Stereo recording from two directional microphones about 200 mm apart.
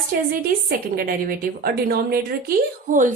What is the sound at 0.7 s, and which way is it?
Speech, 45° right (ahead or behind).